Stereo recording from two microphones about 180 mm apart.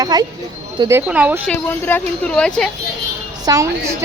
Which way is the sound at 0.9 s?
10° right (ahead or behind).